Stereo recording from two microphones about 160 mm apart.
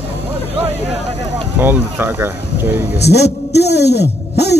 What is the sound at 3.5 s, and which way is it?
Speech, 90° left.